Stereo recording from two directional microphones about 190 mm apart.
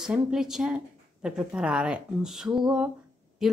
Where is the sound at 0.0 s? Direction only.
5° right (ahead or behind).